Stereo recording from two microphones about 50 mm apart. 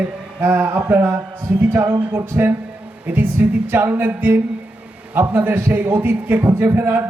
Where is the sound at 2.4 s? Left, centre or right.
Right.